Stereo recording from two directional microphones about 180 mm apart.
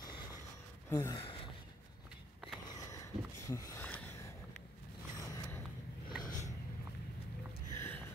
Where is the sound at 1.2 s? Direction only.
30° left (ahead or behind).